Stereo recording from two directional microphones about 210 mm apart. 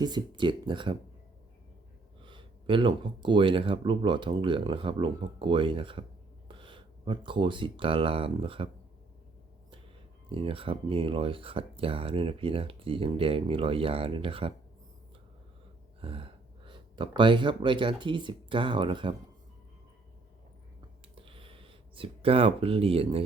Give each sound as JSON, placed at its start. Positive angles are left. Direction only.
{"t": 0.0, "sound": "speech", "side_deg": -20}
{"t": 2.2, "sound": "speech", "side_deg": -25}
{"t": 10.2, "sound": "speech", "side_deg": -25}
{"t": 16.0, "sound": "speech", "side_deg": -25}
{"t": 21.2, "sound": "a sound", "side_deg": -25}